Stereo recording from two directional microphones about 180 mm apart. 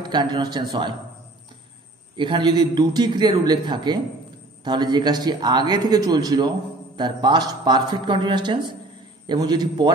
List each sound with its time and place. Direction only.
0.0 s a man's voice: 25° right (ahead or behind)
2.1 s a man's voice: 25° right (ahead or behind)